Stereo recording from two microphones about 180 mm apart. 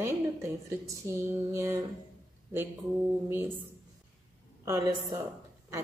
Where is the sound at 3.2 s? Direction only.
10° right (ahead or behind).